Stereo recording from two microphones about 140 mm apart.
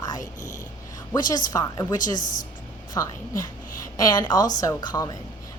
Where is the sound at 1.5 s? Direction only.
25° left (ahead or behind).